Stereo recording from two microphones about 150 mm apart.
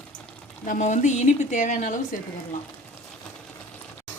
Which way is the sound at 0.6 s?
55° left (ahead or behind).